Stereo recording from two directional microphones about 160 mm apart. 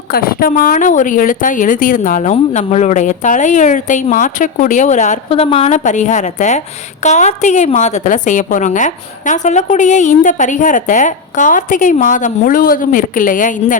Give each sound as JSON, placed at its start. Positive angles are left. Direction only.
{"t": 0.1, "sound": "a woman's voice", "side_deg": 65}
{"t": 2.3, "sound": "a woman's voice", "side_deg": 45}